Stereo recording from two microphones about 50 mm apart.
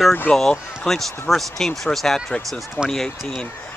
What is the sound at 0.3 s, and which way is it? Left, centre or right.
Speech, centre.